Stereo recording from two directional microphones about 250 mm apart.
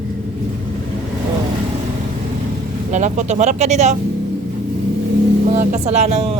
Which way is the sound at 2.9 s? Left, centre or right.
Right.